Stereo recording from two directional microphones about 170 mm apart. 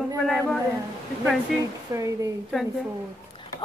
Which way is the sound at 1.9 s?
20° right (ahead or behind).